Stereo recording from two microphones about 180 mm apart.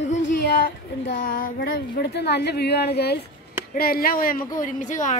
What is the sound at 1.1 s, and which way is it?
A woman's voice, 55° left (ahead or behind).